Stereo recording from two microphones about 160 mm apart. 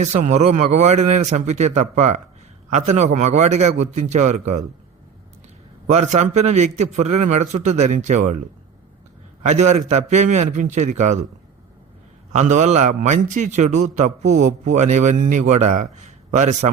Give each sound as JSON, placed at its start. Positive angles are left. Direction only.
{"t": 0.0, "sound": "a man's voice", "side_deg": -45}
{"t": 5.9, "sound": "a man's voice", "side_deg": -45}
{"t": 9.4, "sound": "a man's voice", "side_deg": -45}
{"t": 12.3, "sound": "a man's voice", "side_deg": -50}